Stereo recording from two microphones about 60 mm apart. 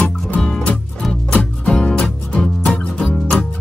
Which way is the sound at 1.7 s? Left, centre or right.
Centre.